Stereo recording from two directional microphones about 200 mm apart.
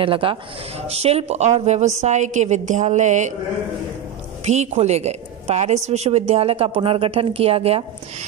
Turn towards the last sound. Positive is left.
turn(degrees=-30)  # may be behind; listen again after turning